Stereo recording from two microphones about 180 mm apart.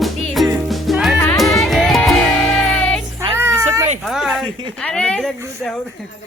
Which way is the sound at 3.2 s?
15° right (ahead or behind).